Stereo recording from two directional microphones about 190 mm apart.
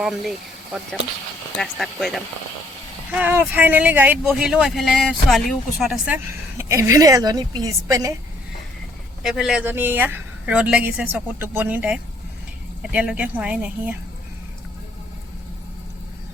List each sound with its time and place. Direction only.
0.0 s speech: centre (ahead or behind)
6.1 s speech: 15° right (ahead or behind)
9.2 s speech: 5° right (ahead or behind)